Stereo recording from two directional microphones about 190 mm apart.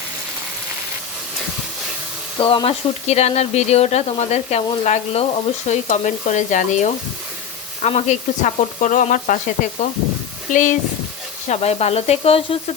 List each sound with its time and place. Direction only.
2.4 s speech: 25° left (ahead or behind); by 9.4 s 45° left (ahead or behind)
10.5 s speech: 40° left (ahead or behind)